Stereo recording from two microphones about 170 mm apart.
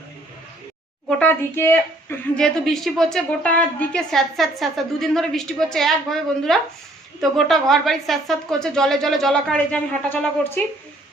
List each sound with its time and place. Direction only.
1.2 s a woman's voice: 10° left (ahead or behind)